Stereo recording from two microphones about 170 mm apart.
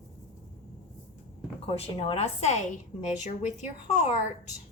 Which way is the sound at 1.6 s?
35° left (ahead or behind).